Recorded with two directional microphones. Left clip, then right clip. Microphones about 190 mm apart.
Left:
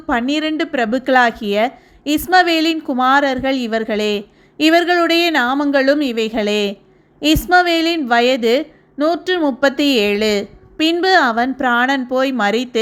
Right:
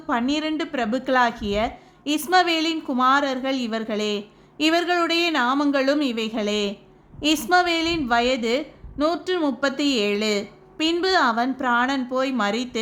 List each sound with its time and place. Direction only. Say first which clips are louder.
0.1 s a woman's voice: left 6 dB; 20° left (ahead or behind)